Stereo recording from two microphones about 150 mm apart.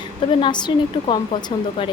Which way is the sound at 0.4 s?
30° left (ahead or behind).